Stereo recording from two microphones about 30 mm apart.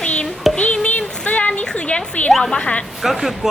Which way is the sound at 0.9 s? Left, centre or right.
Left.